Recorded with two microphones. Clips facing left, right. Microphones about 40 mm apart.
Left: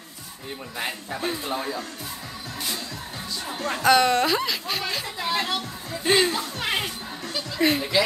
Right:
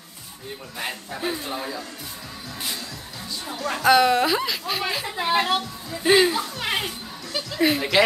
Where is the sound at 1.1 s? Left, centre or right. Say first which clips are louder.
Even; centre.